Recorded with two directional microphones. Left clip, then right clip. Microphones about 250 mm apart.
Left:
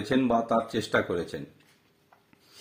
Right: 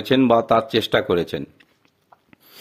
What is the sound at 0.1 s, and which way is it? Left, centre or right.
Speech, right.